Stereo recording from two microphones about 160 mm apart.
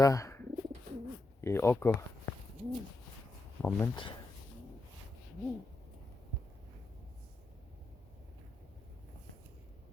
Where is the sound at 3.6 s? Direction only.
10° left (ahead or behind).